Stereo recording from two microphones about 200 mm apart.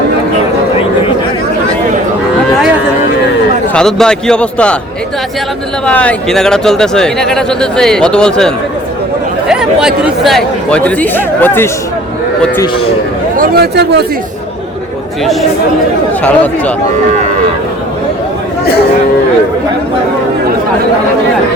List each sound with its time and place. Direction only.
3.8 s speech: 5° left (ahead or behind)
5.8 s speech: 5° left (ahead or behind)
13.3 s speech: 50° right (ahead or behind)
15.2 s speech: centre (ahead or behind)